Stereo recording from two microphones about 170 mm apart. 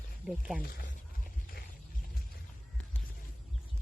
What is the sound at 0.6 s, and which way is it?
Speech, 60° left (ahead or behind).